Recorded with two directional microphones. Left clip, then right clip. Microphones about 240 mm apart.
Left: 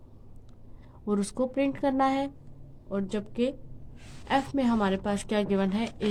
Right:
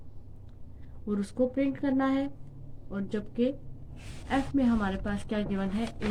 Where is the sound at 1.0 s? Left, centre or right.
Left.